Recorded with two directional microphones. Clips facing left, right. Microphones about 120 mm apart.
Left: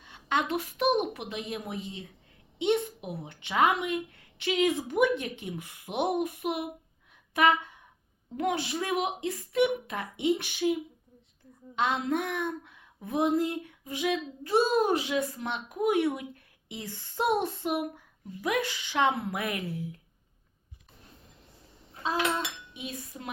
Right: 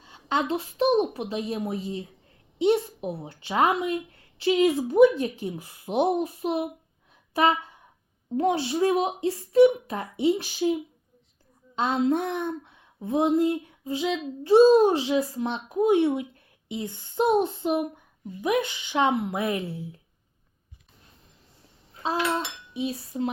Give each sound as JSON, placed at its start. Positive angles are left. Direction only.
{"t": 0.0, "sound": "speech", "side_deg": -30}
{"t": 11.8, "sound": "speech", "side_deg": -30}
{"t": 22.0, "sound": "dishes", "side_deg": -30}